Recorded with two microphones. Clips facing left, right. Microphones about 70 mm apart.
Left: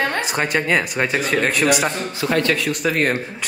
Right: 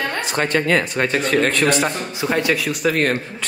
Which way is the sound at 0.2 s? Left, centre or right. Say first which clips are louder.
Right 1 dB; centre.